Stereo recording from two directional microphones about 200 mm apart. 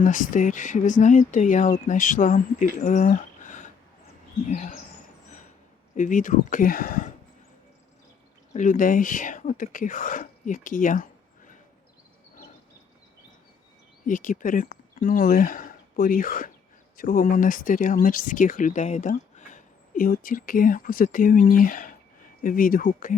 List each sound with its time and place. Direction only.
0.0 s speech: 40° left (ahead or behind)
5.9 s speech: 40° left (ahead or behind)
8.5 s speech: 40° left (ahead or behind)
14.1 s speech: 40° left (ahead or behind)